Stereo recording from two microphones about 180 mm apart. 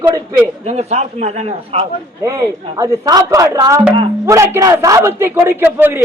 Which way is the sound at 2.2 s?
15° right (ahead or behind).